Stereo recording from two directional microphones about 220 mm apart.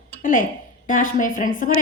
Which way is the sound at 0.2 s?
35° left (ahead or behind).